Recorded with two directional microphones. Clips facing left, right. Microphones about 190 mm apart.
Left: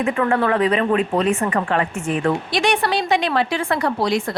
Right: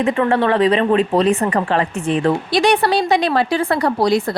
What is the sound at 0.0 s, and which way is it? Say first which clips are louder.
Speech: right 3 dB; 30° right (ahead or behind).